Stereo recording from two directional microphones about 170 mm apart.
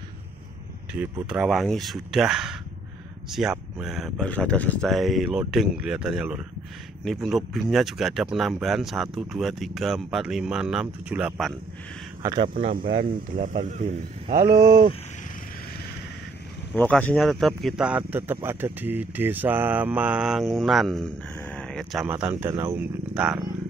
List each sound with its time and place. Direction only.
1.2 s speech: 5° right (ahead or behind)
12.2 s speech: 20° right (ahead or behind)
12.5 s speech: 55° right (ahead or behind)
13.7 s speech: 40° right (ahead or behind)
14.5 s speech: 60° right (ahead or behind)
16.7 s speech: 10° left (ahead or behind)
22.0 s speech: 10° right (ahead or behind)